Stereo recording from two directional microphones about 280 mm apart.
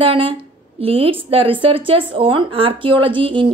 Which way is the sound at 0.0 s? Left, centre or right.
Centre.